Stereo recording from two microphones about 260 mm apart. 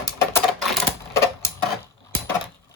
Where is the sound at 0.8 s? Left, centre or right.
Centre.